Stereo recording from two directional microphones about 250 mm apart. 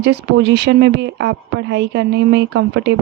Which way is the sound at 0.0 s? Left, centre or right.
Right.